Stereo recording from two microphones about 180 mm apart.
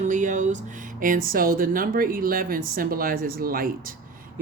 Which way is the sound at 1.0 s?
50° right (ahead or behind).